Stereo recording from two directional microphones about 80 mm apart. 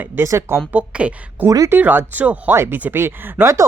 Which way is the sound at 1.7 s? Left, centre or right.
Right.